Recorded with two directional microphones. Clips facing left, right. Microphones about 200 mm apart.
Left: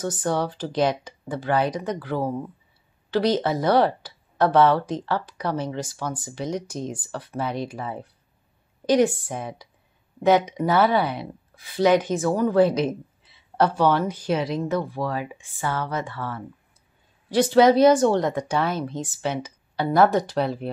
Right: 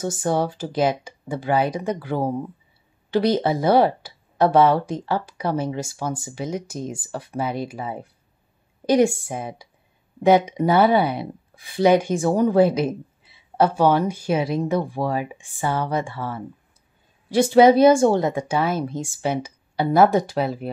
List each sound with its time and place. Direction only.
0.0 s speech: 10° right (ahead or behind)
12.2 s speech: 25° right (ahead or behind)
12.4 s speech: 10° right (ahead or behind)